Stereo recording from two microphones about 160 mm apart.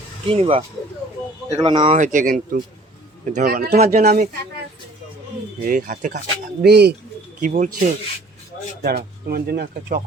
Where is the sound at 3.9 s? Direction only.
60° right (ahead or behind).